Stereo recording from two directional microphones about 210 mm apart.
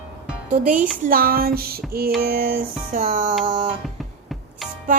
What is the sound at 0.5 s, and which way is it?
Speech, 40° right (ahead or behind).